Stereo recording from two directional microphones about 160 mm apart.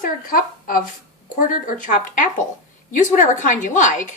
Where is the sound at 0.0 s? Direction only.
60° left (ahead or behind).